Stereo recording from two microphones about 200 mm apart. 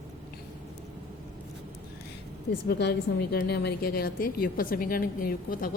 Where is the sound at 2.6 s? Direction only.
55° left (ahead or behind).